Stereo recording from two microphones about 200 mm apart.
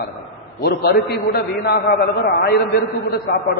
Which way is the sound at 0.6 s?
55° left (ahead or behind).